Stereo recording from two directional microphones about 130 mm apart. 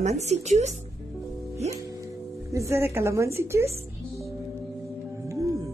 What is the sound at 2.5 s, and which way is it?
A woman's voice, 20° right (ahead or behind).